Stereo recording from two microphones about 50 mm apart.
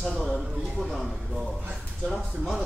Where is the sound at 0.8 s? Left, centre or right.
Centre.